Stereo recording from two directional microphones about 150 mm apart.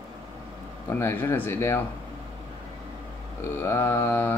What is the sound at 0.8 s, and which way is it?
Speech, 15° left (ahead or behind).